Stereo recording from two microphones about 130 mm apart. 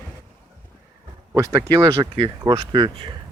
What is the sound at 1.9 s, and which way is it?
Speech, 45° right (ahead or behind).